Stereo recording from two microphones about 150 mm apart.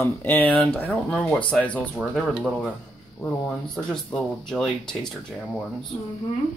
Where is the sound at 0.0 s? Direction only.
15° left (ahead or behind).